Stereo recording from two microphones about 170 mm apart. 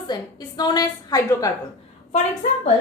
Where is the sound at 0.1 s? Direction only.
25° left (ahead or behind).